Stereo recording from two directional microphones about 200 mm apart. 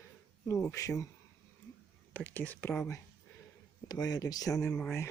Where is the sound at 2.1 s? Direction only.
10° left (ahead or behind).